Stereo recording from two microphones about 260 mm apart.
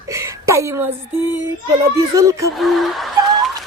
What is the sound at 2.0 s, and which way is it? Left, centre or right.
Speech, centre.